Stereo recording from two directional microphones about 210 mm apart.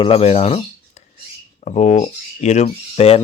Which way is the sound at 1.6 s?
30° left (ahead or behind).